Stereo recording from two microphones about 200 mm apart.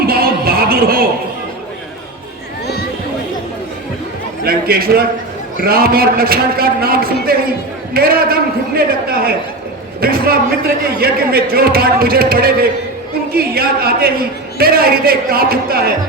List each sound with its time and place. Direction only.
0.1 s music: 50° right (ahead or behind)
4.4 s a man's voice: 50° right (ahead or behind)